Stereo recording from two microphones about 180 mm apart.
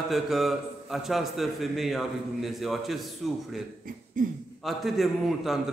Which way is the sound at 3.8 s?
50° right (ahead or behind).